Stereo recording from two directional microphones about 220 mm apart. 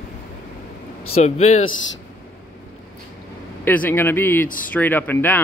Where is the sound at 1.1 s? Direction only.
30° left (ahead or behind).